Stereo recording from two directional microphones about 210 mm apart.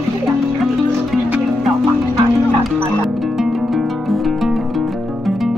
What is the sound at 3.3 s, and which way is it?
Music, centre (ahead or behind).